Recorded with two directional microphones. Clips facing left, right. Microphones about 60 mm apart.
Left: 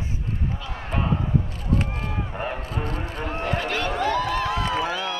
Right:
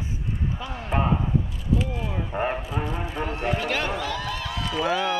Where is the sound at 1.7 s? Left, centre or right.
Left.